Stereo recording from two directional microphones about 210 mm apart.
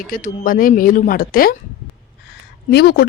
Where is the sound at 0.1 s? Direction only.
40° left (ahead or behind).